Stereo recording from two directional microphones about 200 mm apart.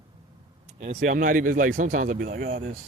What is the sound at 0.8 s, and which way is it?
Speech, 35° right (ahead or behind).